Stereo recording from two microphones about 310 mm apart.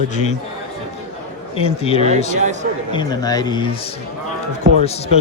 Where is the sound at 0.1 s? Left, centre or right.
Left.